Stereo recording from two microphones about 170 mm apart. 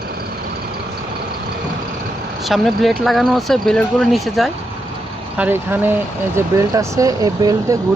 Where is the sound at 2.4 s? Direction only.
Centre (ahead or behind).